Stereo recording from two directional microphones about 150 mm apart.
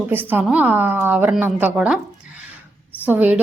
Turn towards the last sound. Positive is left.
turn(degrees=-10)  # may be behind; listen again after turning